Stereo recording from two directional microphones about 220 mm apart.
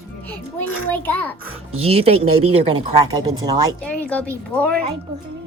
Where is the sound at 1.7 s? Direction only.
25° right (ahead or behind).